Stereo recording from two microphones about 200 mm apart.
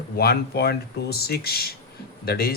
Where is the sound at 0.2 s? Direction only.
50° left (ahead or behind).